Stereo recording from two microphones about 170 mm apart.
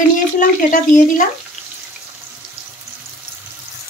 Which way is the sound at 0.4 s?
50° left (ahead or behind).